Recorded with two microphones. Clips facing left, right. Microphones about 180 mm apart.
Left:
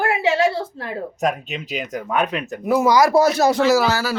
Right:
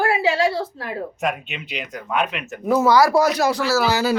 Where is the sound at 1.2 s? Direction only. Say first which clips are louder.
Left 5 dB; 40° left (ahead or behind).